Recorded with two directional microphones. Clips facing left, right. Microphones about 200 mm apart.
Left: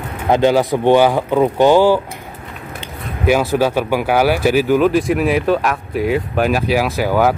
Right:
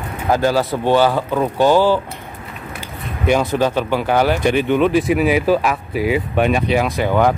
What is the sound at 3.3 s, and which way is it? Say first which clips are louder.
Speech: left 2 dB; 5° left (ahead or behind).